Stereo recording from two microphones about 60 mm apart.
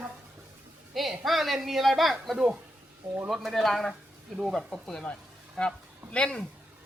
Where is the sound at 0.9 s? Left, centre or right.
Centre.